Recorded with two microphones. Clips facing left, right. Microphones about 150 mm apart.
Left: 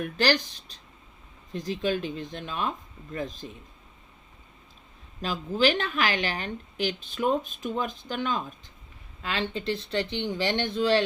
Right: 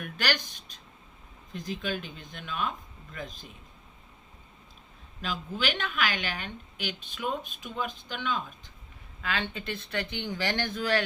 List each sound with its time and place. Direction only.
0.0 s a woman's voice: 35° left (ahead or behind)
5.2 s a woman's voice: 40° left (ahead or behind)